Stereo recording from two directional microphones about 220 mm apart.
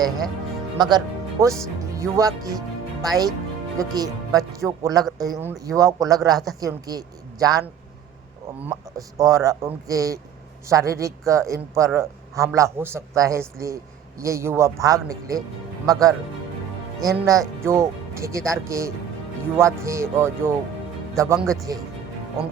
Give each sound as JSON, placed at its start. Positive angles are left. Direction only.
{"t": 0.8, "sound": "a man's voice", "side_deg": -20}